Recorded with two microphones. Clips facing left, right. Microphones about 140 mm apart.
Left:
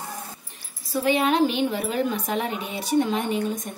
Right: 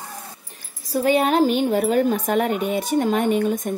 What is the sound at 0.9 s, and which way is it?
A woman's voice, 40° right (ahead or behind).